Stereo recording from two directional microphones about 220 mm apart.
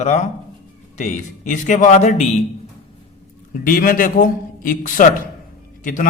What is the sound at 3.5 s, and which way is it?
A man's voice, 40° left (ahead or behind).